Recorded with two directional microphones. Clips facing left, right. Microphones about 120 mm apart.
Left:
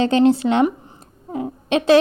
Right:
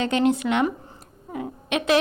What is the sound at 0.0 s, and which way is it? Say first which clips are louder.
A woman's voice: left 6 dB; 30° left (ahead or behind).